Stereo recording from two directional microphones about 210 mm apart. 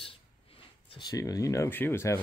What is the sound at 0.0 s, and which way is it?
Speech, 25° left (ahead or behind).